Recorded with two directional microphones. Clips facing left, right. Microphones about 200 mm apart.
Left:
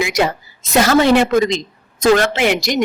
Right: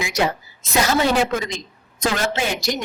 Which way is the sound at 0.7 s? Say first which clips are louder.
Left 7 dB; 75° left (ahead or behind).